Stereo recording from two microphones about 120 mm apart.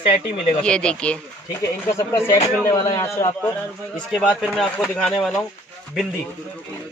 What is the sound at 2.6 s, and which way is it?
Speech, 25° left (ahead or behind).